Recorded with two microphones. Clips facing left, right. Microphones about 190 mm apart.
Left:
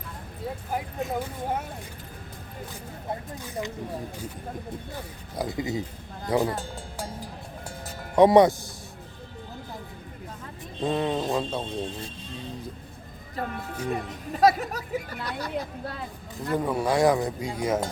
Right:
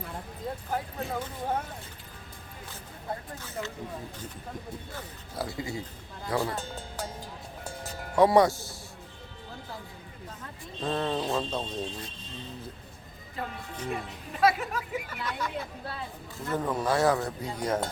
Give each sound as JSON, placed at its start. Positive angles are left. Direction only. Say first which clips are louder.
{"t": 0.7, "sound": "speech", "louder": "left 3 dB", "side_deg": 10}
{"t": 5.4, "sound": "speech", "louder": "left 5 dB", "side_deg": 20}
{"t": 8.1, "sound": "speech", "louder": "left 4 dB", "side_deg": 20}
{"t": 10.8, "sound": "speech", "louder": "left 4 dB", "side_deg": 15}
{"t": 13.3, "sound": "speech", "louder": "left 5 dB", "side_deg": 45}
{"t": 16.5, "sound": "speech", "louder": "left 3 dB", "side_deg": 10}